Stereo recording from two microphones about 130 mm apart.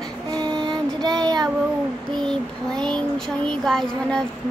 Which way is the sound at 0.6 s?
35° right (ahead or behind).